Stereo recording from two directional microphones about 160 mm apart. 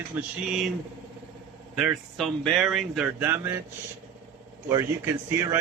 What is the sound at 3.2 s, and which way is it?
Speech, 15° right (ahead or behind).